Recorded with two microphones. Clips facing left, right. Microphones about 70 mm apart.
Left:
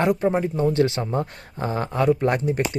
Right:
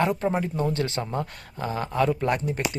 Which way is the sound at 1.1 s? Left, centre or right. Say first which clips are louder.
Left 4 dB; left.